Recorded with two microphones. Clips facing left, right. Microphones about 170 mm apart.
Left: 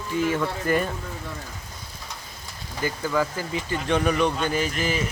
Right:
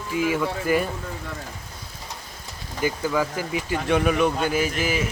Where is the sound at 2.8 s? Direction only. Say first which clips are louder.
Right 1 dB; 10° right (ahead or behind).